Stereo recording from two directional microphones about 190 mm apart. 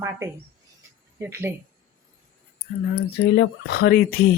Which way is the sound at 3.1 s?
60° left (ahead or behind).